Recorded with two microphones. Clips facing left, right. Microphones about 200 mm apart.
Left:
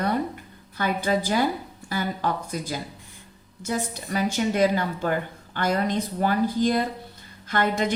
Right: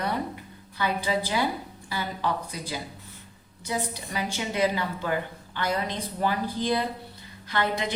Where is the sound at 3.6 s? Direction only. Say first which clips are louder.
Left 3 dB; 45° left (ahead or behind).